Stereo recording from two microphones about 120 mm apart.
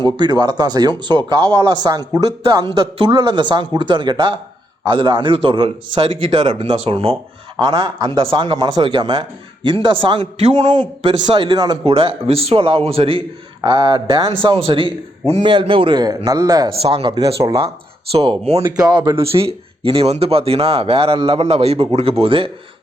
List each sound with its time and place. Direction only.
0.0 s a man's voice: 40° right (ahead or behind)
7.6 s speech: 40° right (ahead or behind)
10.4 s a man's voice: 80° right
10.8 s a man's voice: 45° right (ahead or behind)
11.9 s speech: 55° right (ahead or behind)
13.7 s a man's voice: 40° right (ahead or behind)
16.6 s speech: 50° right (ahead or behind)
17.3 s a man's voice: 30° right (ahead or behind)
18.1 s speech: 55° right (ahead or behind)
18.6 s a man's voice: 30° right (ahead or behind)
19.2 s speech: 55° right (ahead or behind)